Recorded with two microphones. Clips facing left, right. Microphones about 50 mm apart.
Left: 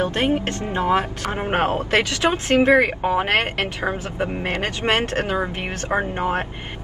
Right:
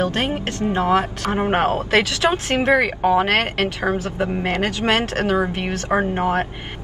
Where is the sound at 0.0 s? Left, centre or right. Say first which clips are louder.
Even; left.